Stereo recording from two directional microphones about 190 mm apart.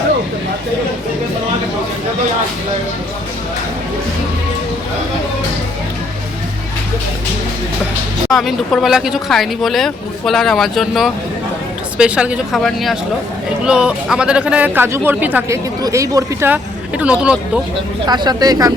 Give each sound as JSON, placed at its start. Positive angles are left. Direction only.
{"t": 8.3, "sound": "speech", "side_deg": 0}
{"t": 18.0, "sound": "speech", "side_deg": -20}